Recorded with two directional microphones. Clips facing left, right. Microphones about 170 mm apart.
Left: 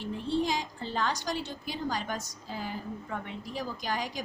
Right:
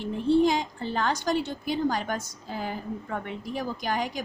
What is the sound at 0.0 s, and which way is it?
A woman's voice, 55° right (ahead or behind).